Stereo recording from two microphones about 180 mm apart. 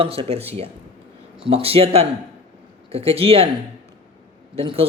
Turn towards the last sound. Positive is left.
turn(degrees=-30)  # may be behind; listen again after turning